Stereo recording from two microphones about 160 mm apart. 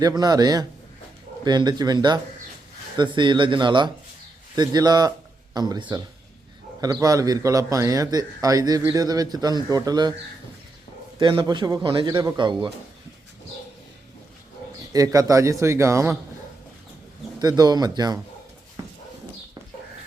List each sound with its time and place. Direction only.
0.2 s a man's voice: 25° right (ahead or behind)
11.2 s a man's voice: 30° right (ahead or behind)
14.9 s a man's voice: 20° right (ahead or behind)
17.4 s a man's voice: 25° right (ahead or behind)